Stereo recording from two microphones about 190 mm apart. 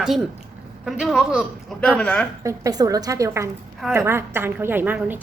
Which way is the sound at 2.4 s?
20° right (ahead or behind).